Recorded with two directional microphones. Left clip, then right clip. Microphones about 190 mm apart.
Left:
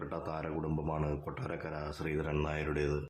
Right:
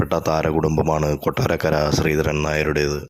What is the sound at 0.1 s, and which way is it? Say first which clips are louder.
Speech: right 19 dB; 40° right (ahead or behind).